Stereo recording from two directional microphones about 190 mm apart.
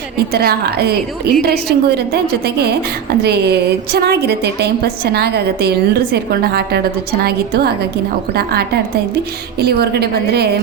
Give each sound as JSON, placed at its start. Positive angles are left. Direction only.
{"t": 0.3, "sound": "a woman's voice", "side_deg": -60}